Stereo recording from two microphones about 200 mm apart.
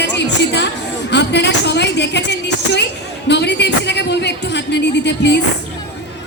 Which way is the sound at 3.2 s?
60° left (ahead or behind).